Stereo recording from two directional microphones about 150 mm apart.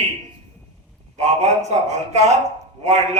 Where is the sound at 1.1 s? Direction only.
45° right (ahead or behind).